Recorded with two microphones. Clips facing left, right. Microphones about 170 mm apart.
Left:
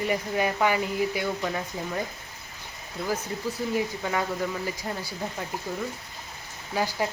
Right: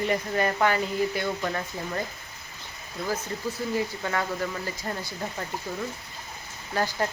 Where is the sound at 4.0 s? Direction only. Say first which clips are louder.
Left 1 dB; 5° left (ahead or behind).